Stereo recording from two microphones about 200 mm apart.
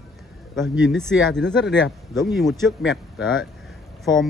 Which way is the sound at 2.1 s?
Centre (ahead or behind).